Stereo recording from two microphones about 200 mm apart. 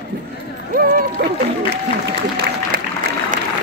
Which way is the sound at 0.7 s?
45° right (ahead or behind).